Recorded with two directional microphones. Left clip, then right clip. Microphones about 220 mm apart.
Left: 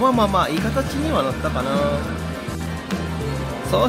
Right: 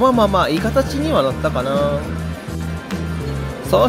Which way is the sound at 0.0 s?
15° right (ahead or behind).